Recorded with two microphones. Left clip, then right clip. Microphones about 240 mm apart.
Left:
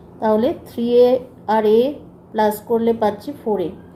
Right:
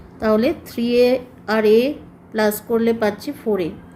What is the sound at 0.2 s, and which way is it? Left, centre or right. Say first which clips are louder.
A woman's voice: even; right.